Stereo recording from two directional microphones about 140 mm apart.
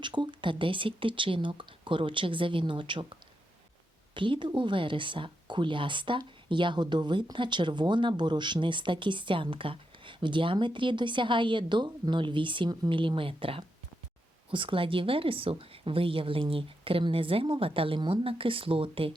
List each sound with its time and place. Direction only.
0.0 s speech: 35° right (ahead or behind)
4.1 s speech: 35° right (ahead or behind)